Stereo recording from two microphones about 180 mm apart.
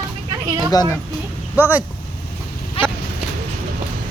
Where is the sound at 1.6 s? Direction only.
10° right (ahead or behind).